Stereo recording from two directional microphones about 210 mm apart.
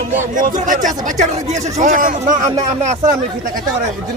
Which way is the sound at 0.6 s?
35° right (ahead or behind).